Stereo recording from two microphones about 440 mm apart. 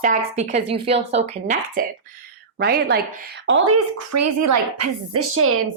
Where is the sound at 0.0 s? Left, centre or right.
Centre.